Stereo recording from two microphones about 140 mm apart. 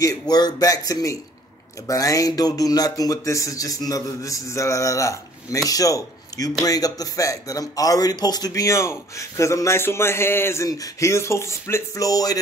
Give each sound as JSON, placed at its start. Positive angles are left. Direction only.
{"t": 0.0, "sound": "speech", "side_deg": 25}